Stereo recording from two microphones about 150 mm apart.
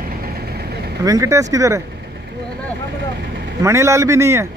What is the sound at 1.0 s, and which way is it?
Speech, 20° right (ahead or behind).